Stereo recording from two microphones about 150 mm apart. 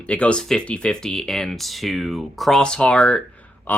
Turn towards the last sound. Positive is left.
turn(degrees=10)  # may be behind; listen again after turning